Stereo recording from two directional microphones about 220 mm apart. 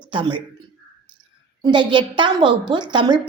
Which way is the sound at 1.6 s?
20° right (ahead or behind).